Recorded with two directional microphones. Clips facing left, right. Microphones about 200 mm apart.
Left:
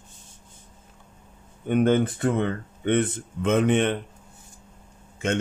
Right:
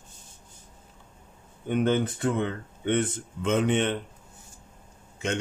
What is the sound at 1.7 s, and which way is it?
Speech, 55° left (ahead or behind).